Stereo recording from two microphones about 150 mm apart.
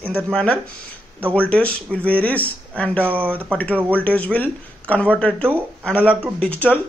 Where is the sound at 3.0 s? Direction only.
15° right (ahead or behind).